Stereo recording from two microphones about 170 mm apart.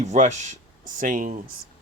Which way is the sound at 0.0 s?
45° right (ahead or behind).